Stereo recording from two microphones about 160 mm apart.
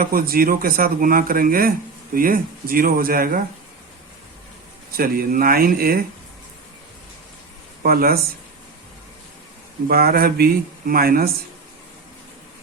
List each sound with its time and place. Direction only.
0.0 s speech: 65° right (ahead or behind)
4.9 s speech: 65° right (ahead or behind)
7.8 s speech: 65° right (ahead or behind)
9.9 s speech: 70° right (ahead or behind)